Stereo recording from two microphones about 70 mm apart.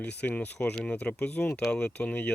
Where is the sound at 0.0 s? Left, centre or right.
Left.